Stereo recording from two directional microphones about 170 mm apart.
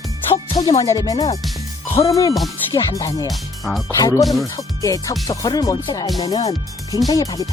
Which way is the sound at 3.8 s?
20° left (ahead or behind).